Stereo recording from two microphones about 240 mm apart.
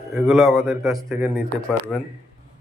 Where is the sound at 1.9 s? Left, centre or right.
Centre.